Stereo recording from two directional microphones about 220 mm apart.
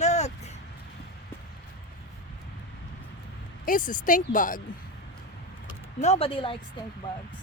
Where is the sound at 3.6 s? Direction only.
35° left (ahead or behind).